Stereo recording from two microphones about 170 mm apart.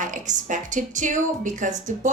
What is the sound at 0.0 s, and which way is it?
Speech, 50° right (ahead or behind).